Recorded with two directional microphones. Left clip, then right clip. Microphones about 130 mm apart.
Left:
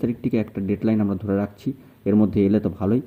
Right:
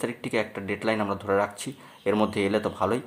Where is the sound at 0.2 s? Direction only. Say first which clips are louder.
Left 2 dB; 55° left (ahead or behind).